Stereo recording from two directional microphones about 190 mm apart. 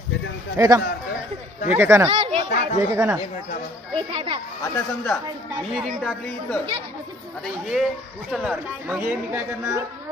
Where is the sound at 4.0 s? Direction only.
30° right (ahead or behind).